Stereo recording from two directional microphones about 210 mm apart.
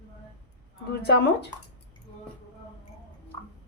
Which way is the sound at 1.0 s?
50° left (ahead or behind).